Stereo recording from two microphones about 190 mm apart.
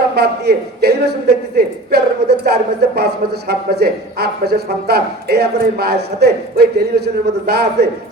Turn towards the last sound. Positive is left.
turn(degrees=-55)  # may be behind; listen again after turning